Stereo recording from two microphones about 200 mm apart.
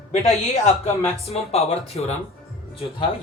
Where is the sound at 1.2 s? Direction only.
30° left (ahead or behind).